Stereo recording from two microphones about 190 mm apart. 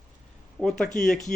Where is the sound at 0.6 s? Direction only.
Centre (ahead or behind).